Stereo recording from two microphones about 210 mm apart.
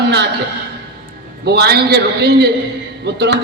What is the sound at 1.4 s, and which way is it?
A man's voice, 50° right (ahead or behind).